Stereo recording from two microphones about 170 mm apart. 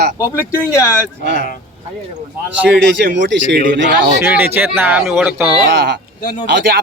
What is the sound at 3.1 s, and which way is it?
Speech, 90° right.